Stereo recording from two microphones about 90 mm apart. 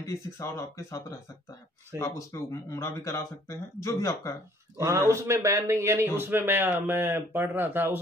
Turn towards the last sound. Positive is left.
turn(degrees=-25)  # may be behind; listen again after turning